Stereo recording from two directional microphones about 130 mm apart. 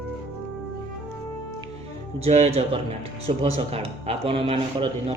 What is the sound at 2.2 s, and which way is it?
Speech, 55° right (ahead or behind).